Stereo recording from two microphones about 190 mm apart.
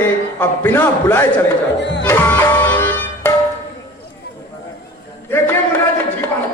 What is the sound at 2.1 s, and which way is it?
Music, 10° left (ahead or behind).